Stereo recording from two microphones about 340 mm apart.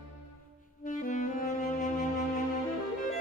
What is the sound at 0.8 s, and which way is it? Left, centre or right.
Saxophone, left.